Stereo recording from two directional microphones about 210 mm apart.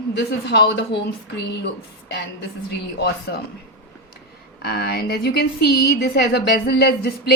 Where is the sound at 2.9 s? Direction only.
50° left (ahead or behind).